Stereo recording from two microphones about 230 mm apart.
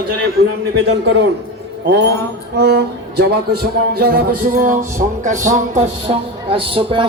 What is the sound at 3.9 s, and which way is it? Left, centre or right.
Music, right.